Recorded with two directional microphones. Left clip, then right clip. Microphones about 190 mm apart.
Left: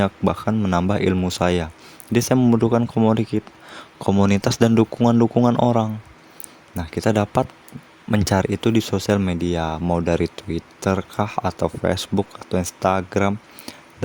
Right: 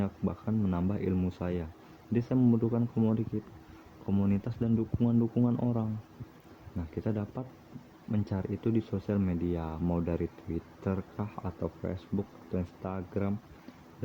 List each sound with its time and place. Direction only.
0.0 s speech: 60° left (ahead or behind)